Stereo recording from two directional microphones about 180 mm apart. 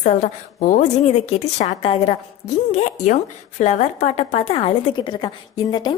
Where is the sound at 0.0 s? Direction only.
40° left (ahead or behind).